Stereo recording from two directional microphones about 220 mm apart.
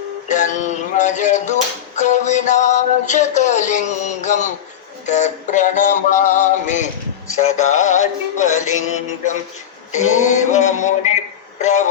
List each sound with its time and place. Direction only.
0.3 s speech: 35° left (ahead or behind)
9.9 s speech: 35° left (ahead or behind)